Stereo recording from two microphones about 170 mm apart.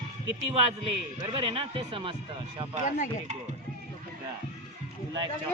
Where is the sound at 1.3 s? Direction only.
35° right (ahead or behind).